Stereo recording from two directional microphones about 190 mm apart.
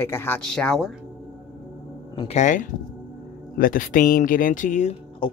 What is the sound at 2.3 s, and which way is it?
Speech, 40° left (ahead or behind).